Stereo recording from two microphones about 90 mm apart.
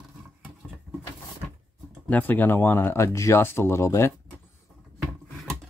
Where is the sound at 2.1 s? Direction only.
20° left (ahead or behind).